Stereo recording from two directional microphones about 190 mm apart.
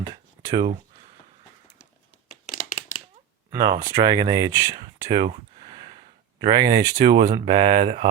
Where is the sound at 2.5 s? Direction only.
40° left (ahead or behind).